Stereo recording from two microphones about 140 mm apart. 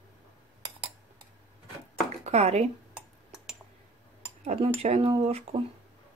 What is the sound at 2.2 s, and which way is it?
Speech, 50° right (ahead or behind).